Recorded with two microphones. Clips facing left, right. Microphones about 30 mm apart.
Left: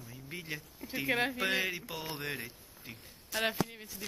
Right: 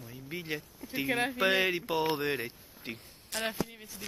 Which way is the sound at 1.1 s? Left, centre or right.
Centre.